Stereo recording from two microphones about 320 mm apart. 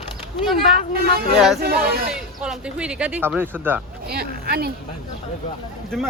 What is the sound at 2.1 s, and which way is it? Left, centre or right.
Speech, centre.